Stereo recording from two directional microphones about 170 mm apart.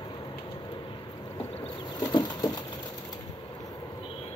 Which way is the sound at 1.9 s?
25° left (ahead or behind).